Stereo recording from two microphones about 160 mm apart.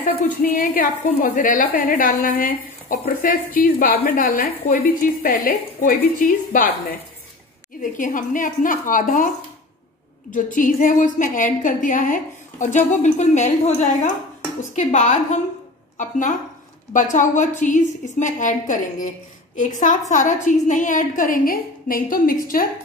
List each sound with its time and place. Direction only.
0.0 s a woman's voice: 60° left (ahead or behind)
8.0 s a woman's voice: 55° left (ahead or behind)
10.3 s a woman's voice: 55° left (ahead or behind)